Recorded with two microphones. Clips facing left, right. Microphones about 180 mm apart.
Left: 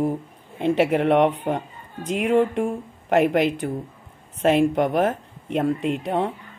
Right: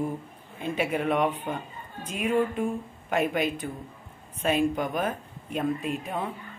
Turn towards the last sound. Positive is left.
turn(degrees=80)